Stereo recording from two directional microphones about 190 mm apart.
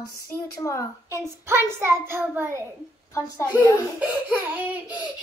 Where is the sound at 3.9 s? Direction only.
10° right (ahead or behind).